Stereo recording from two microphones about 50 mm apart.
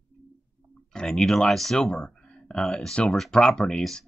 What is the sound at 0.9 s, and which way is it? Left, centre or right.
Speech, centre.